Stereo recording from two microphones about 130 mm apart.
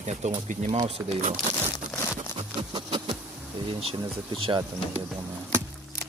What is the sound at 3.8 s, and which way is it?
Speech, 45° right (ahead or behind).